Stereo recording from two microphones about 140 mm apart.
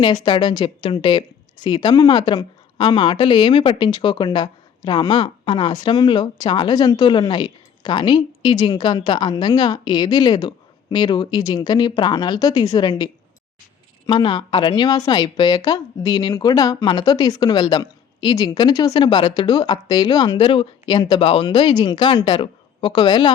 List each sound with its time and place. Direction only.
0.0 s a woman's voice: 30° left (ahead or behind)
14.1 s a woman's voice: 35° left (ahead or behind)